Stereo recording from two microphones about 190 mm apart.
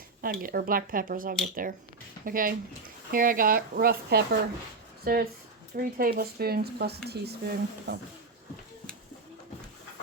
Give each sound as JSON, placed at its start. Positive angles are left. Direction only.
{"t": 0.2, "sound": "speech", "side_deg": -50}